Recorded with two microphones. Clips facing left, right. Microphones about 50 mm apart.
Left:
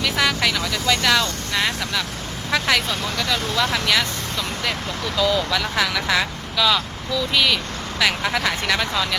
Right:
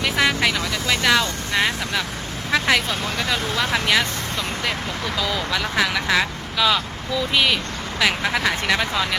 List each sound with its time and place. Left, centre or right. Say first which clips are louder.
0.0 s vehicle: right 1 dB; centre
2.5 s speech: right 1 dB; centre